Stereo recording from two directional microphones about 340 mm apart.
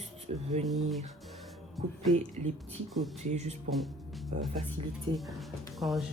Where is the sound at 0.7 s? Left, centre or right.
Centre.